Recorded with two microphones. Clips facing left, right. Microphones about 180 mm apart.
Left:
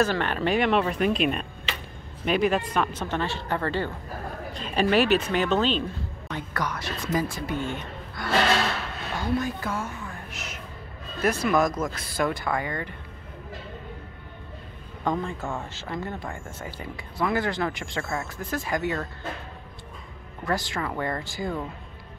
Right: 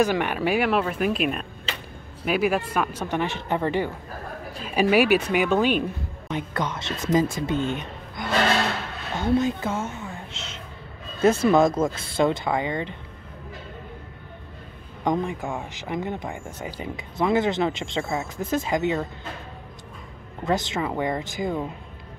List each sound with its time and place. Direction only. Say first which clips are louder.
0.0 s a woman's voice: right 2 dB; 15° right (ahead or behind)
15.0 s speech: right 3 dB; 15° right (ahead or behind)
20.4 s speech: right 4 dB; 20° right (ahead or behind)